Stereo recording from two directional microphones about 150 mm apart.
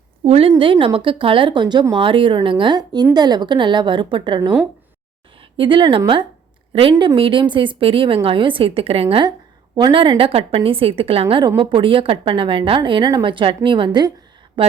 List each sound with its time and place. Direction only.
0.3 s a woman's voice: 40° right (ahead or behind)
5.5 s a woman's voice: 35° right (ahead or behind)